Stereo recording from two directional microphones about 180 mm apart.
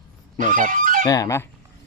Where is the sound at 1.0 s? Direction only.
20° left (ahead or behind).